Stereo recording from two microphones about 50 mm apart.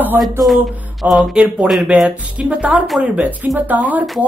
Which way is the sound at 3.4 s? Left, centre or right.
Right.